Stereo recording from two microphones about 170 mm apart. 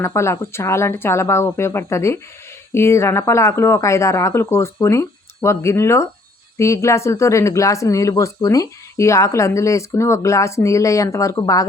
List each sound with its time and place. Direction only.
0.0 s speech: 15° left (ahead or behind)